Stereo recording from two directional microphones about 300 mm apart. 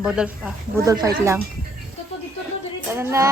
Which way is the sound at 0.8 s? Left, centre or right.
Centre.